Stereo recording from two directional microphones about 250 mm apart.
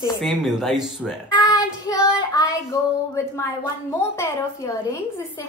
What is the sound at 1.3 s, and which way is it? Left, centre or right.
A woman's voice, centre.